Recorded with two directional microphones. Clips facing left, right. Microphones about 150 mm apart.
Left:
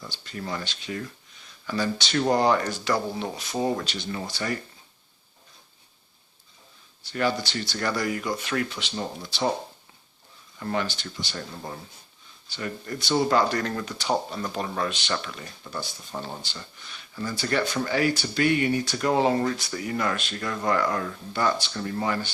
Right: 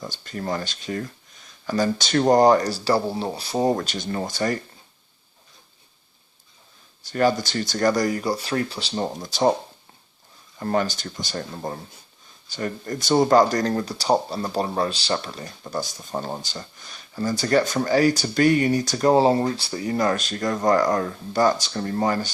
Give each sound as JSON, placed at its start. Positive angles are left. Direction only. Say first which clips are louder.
{"t": 0.0, "sound": "speech", "louder": "right 5 dB", "side_deg": -45}
{"t": 7.0, "sound": "speech", "louder": "right 5 dB", "side_deg": -45}
{"t": 10.6, "sound": "speech", "louder": "right 5 dB", "side_deg": -40}